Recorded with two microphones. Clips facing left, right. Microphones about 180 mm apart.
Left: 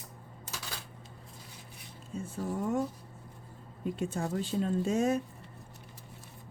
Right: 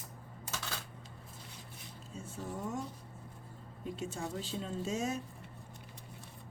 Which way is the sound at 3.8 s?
55° left (ahead or behind).